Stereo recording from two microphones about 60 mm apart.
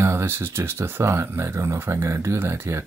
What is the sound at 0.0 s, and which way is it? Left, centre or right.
Speech, right.